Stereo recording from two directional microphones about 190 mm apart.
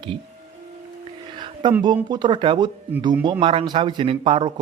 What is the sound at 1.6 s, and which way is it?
Speech, 25° right (ahead or behind).